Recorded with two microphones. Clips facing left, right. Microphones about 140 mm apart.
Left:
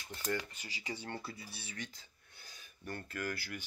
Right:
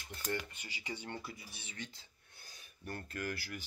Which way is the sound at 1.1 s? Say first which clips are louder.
Left 1 dB; 15° right (ahead or behind).